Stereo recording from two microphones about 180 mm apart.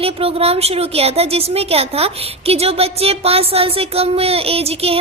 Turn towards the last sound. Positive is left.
turn(degrees=-35)  # may be behind; listen again after turning